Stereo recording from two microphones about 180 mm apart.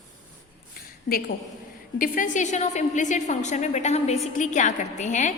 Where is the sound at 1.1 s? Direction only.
55° left (ahead or behind).